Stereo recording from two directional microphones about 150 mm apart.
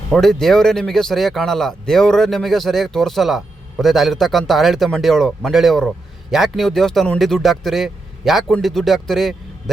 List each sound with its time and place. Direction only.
0.1 s speech: 5° left (ahead or behind)